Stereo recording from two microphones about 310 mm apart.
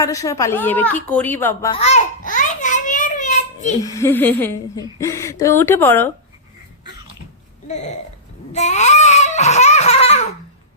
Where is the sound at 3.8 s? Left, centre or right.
Centre.